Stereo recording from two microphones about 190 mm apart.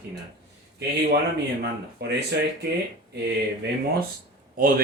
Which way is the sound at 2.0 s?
60° right (ahead or behind).